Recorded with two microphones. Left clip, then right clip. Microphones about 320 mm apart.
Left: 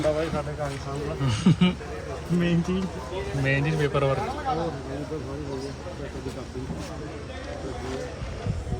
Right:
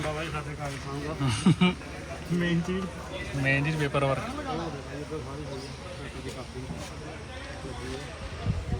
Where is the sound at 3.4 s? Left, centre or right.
Centre.